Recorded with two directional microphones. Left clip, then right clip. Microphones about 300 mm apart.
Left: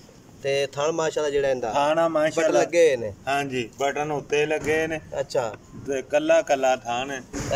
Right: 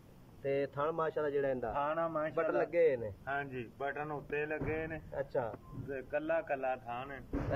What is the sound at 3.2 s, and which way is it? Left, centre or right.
Speech, centre.